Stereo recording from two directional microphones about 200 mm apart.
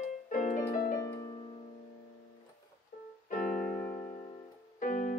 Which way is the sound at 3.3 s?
5° left (ahead or behind).